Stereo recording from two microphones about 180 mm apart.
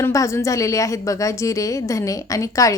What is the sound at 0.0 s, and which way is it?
A woman's voice, 15° left (ahead or behind).